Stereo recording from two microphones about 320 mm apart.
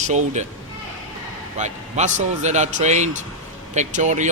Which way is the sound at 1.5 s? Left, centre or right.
Right.